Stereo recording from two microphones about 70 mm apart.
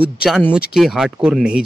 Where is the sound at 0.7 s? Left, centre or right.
Centre.